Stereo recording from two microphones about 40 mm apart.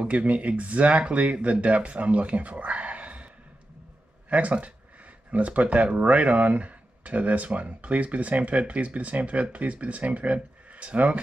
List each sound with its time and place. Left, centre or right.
0.1 s speech: right
4.3 s speech: right